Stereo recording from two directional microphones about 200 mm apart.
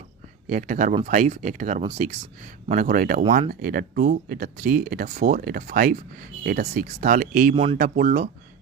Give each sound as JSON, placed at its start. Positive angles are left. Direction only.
{"t": 0.4, "sound": "speech", "side_deg": -40}
{"t": 7.5, "sound": "speech", "side_deg": -25}
{"t": 7.8, "sound": "speech", "side_deg": -40}